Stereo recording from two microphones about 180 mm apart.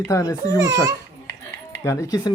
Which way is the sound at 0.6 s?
15° right (ahead or behind).